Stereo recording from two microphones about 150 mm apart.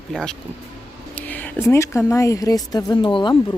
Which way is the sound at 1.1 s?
10° left (ahead or behind).